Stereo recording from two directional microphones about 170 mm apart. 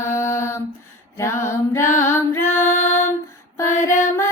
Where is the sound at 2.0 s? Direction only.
15° left (ahead or behind).